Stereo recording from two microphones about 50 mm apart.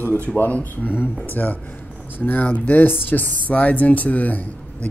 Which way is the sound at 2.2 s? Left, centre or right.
Left.